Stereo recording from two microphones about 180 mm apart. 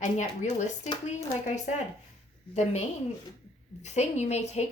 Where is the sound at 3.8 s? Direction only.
40° left (ahead or behind).